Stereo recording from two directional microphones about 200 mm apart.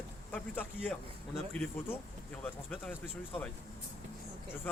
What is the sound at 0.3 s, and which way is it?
Speech, 5° left (ahead or behind).